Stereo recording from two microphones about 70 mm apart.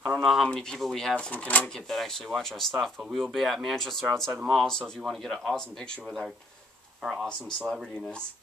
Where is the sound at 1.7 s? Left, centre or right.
Centre.